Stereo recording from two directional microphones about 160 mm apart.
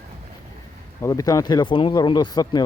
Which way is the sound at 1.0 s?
20° left (ahead or behind).